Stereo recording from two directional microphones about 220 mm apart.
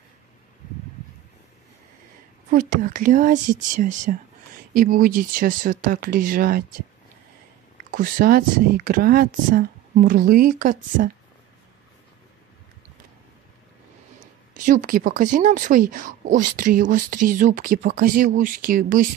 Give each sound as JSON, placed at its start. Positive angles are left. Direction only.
{"t": 2.5, "sound": "speech", "side_deg": -35}
{"t": 7.9, "sound": "speech", "side_deg": -40}
{"t": 14.2, "sound": "speech", "side_deg": -35}